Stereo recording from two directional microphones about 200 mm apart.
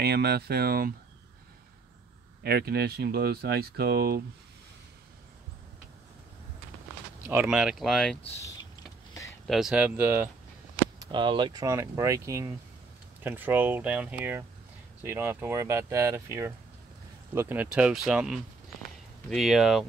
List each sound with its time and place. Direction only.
0.0 s speech: 55° right (ahead or behind)
2.4 s speech: 50° right (ahead or behind)
7.2 s speech: 5° right (ahead or behind)
8.4 s a sound: 15° left (ahead or behind)
9.5 s speech: centre (ahead or behind)
11.0 s speech: 20° right (ahead or behind); by 19.8 s centre (ahead or behind)